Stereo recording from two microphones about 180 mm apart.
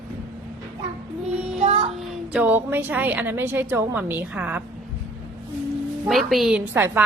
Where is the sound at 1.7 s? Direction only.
30° right (ahead or behind).